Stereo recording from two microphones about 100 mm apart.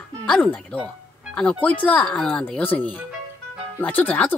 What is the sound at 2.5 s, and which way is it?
A woman's voice, 15° left (ahead or behind).